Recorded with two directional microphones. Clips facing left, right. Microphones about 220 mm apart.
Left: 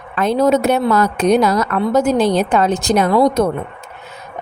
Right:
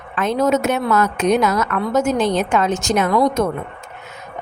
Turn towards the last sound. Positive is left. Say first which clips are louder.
# left 3 dB
turn(degrees=35)  # may be behind; listen again after turning